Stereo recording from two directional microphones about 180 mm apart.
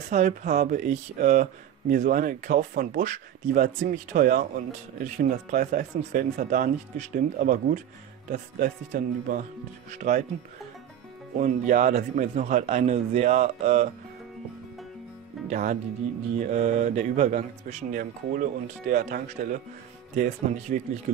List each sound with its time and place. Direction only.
0.1 s speech: 40° right (ahead or behind)
11.3 s speech: 45° right (ahead or behind)
15.5 s speech: 45° right (ahead or behind)